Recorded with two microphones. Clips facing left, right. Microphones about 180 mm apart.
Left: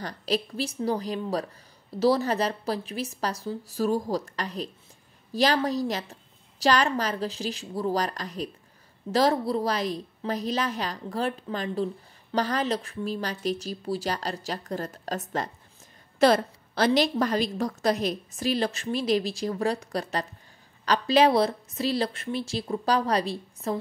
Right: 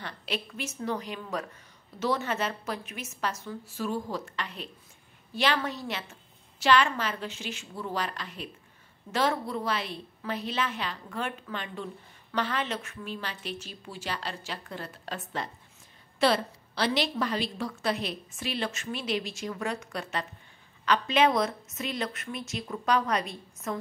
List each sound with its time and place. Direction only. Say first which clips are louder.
0.0 s a woman's voice: left 7 dB; 35° left (ahead or behind)